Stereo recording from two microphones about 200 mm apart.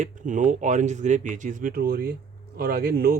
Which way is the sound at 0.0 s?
40° right (ahead or behind).